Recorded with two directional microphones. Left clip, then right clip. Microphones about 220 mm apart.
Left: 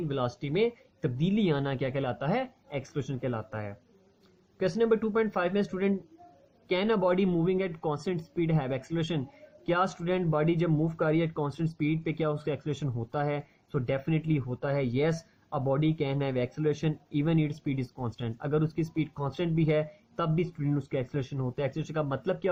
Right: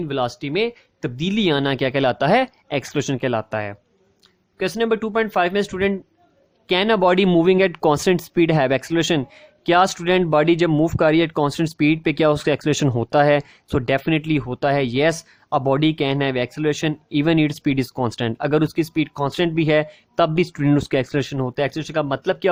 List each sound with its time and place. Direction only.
0.1 s speech: 40° right (ahead or behind)